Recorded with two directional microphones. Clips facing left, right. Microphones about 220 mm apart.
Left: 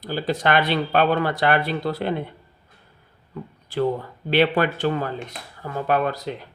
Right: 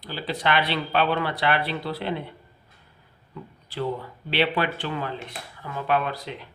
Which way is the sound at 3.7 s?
45° left (ahead or behind).